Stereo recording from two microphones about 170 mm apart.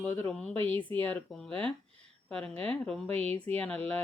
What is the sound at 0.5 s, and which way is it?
Speech, 30° right (ahead or behind).